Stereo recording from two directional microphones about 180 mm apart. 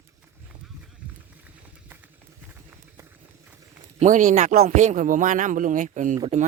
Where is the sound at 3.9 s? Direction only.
45° right (ahead or behind).